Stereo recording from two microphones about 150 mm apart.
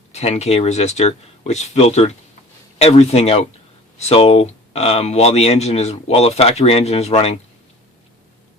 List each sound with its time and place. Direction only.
0.1 s speech: 45° left (ahead or behind)